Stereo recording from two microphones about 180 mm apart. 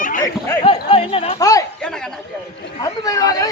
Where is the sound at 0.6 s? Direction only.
30° left (ahead or behind).